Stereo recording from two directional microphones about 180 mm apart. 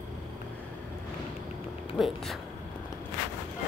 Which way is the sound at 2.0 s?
Centre (ahead or behind).